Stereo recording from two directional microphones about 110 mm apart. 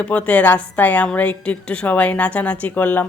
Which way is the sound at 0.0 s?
10° left (ahead or behind).